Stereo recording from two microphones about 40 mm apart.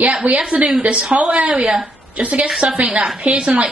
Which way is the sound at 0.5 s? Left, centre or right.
Right.